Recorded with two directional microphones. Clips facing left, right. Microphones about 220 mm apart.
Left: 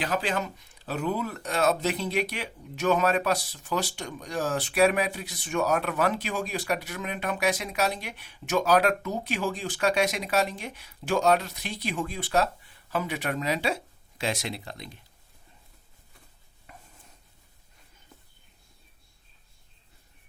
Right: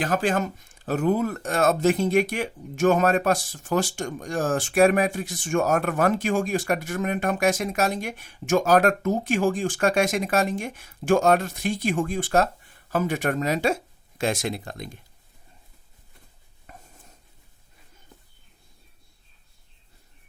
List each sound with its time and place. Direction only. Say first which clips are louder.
0.0 s speech: right 5 dB; 50° right (ahead or behind)
16.7 s stir: right 3 dB; 45° right (ahead or behind)